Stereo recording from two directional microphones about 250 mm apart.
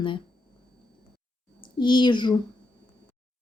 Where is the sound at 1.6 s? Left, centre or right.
Centre.